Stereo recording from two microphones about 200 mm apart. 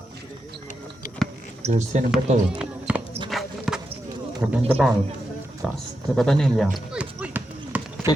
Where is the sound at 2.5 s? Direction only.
5° right (ahead or behind).